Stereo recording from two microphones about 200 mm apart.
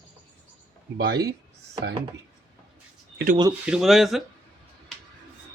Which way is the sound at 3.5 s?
5° right (ahead or behind).